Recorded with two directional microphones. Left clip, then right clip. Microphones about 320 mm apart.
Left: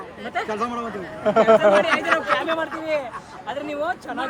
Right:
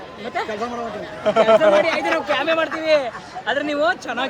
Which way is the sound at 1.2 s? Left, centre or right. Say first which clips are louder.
Right 1 dB; centre.